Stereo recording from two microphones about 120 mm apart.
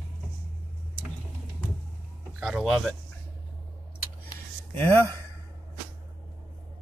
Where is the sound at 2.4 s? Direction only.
5° right (ahead or behind).